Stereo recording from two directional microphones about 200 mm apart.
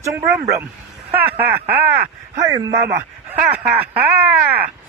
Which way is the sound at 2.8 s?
15° right (ahead or behind).